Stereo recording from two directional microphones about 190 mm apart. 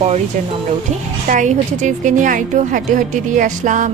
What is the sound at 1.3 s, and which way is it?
Speech, 40° right (ahead or behind).